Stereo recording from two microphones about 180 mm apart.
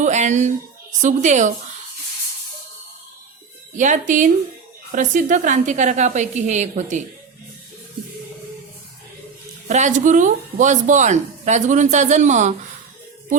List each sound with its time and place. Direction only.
0.0 s speech: 40° right (ahead or behind)
3.8 s speech: 45° right (ahead or behind)
9.6 s speech: 40° right (ahead or behind)